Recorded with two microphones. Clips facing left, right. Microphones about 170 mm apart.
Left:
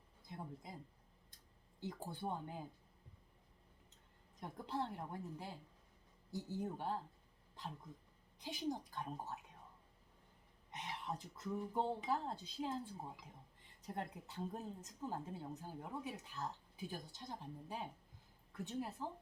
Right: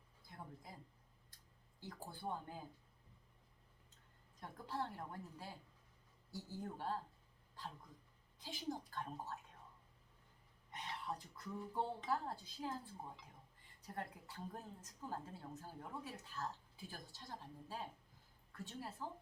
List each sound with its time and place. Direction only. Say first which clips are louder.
0.3 s speech: left 5 dB; 20° left (ahead or behind)
1.8 s a woman's voice: left 4 dB; 20° left (ahead or behind)
4.4 s a woman's voice: left 2 dB; 20° left (ahead or behind)
8.4 s a woman's voice: left 3 dB; 20° left (ahead or behind)
10.7 s a woman's voice: left 1 dB; 20° left (ahead or behind)